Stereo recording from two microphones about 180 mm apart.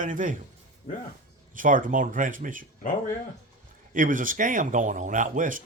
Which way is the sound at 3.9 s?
45° right (ahead or behind).